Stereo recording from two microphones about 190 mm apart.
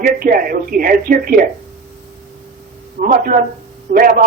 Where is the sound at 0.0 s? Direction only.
50° right (ahead or behind).